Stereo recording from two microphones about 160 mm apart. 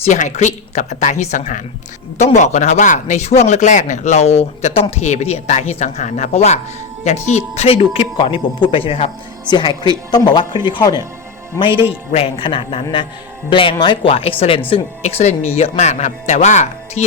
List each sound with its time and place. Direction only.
0.0 s speech: 45° left (ahead or behind); by 11.0 s 25° left (ahead or behind)
12.1 s speech: 35° left (ahead or behind)